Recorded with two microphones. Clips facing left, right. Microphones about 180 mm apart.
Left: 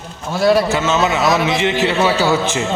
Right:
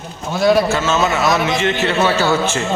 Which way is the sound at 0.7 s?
15° left (ahead or behind).